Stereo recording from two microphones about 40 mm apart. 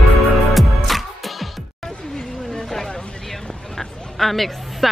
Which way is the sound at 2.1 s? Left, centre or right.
Centre.